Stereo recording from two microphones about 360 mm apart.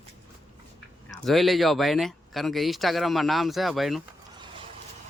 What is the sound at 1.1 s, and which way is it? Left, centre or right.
Speech, centre.